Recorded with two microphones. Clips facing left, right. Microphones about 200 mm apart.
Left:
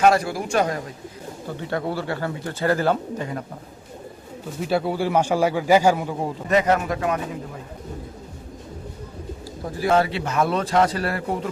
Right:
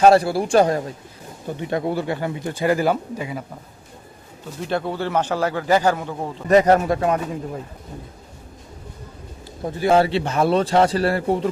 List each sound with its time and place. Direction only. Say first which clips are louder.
0.0 s a man's voice: right 4 dB; 30° right (ahead or behind)
1.6 s speech: right 3 dB; 15° right (ahead or behind)
4.7 s a man's voice: left 2 dB; 10° left (ahead or behind)
6.5 s a man's voice: right 5 dB; 35° right (ahead or behind)
9.7 s a man's voice: right 3 dB; 25° right (ahead or behind)